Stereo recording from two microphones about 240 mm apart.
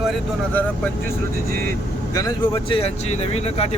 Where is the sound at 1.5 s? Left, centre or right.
Right.